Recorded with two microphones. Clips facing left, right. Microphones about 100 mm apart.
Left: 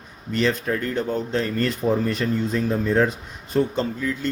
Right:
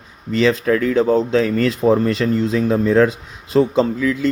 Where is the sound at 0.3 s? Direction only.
90° right.